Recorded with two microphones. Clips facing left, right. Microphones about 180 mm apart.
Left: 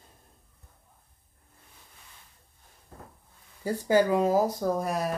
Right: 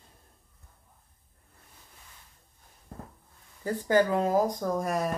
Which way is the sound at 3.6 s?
10° left (ahead or behind).